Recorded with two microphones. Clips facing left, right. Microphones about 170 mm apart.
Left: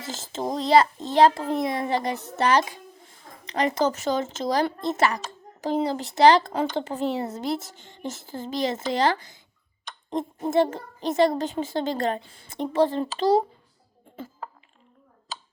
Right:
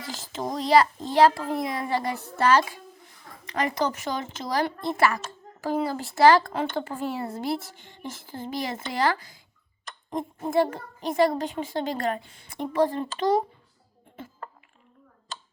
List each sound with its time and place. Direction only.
0.0 s a child's voice: 25° left (ahead or behind)